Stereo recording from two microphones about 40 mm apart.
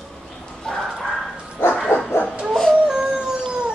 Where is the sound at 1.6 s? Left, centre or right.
Left.